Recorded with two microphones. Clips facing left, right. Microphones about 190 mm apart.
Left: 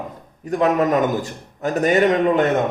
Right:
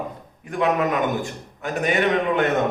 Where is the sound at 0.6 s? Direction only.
40° left (ahead or behind).